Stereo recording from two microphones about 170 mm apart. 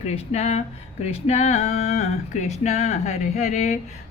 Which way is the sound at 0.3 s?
40° left (ahead or behind).